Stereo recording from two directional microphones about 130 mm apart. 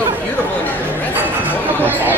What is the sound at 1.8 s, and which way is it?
Speech, 15° right (ahead or behind).